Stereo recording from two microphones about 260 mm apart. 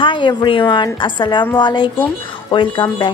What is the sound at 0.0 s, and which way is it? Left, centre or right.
Speech, centre.